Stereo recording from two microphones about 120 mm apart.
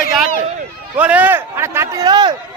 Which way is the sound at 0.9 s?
10° right (ahead or behind).